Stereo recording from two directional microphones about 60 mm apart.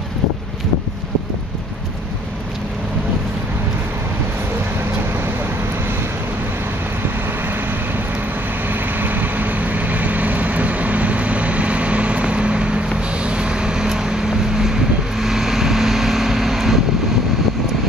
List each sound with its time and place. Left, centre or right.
8.6 s vehicle: right; by 16.8 s centre